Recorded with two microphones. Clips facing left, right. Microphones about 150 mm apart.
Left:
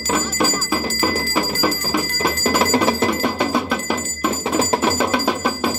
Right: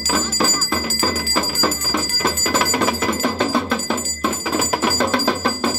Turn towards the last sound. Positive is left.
turn(degrees=10)  # may be behind; listen again after turning